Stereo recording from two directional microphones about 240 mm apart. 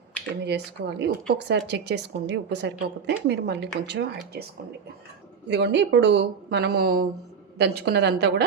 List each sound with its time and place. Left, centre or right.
0.4 s speech: right
5.5 s speech: right